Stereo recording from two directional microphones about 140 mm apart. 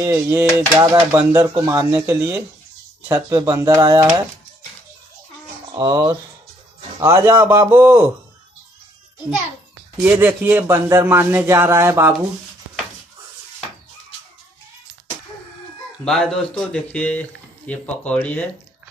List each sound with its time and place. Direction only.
0.0 s a man's voice: 15° right (ahead or behind)
5.7 s a man's voice: 25° right (ahead or behind)
10.0 s a man's voice: 10° right (ahead or behind)
16.0 s speech: 5° left (ahead or behind)